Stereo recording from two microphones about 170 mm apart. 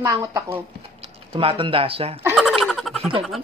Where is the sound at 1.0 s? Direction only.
35° right (ahead or behind).